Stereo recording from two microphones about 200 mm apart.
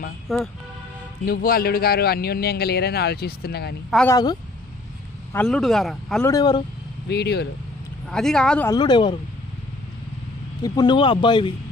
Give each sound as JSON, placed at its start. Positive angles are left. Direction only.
{"t": 0.3, "sound": "speech", "side_deg": 0}
{"t": 1.2, "sound": "a man's voice", "side_deg": 45}
{"t": 4.1, "sound": "speech", "side_deg": 20}
{"t": 5.3, "sound": "speech", "side_deg": 5}
{"t": 6.2, "sound": "speech", "side_deg": 20}
{"t": 7.1, "sound": "speech", "side_deg": 55}
{"t": 8.0, "sound": "speech", "side_deg": 0}
{"t": 8.7, "sound": "speech", "side_deg": 20}
{"t": 10.6, "sound": "speech", "side_deg": 20}